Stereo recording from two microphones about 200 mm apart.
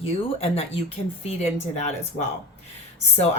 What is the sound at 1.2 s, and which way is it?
Speech, 35° left (ahead or behind).